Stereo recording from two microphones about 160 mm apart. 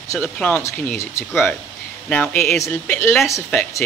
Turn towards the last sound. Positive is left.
turn(degrees=15)  # may be behind; listen again after turning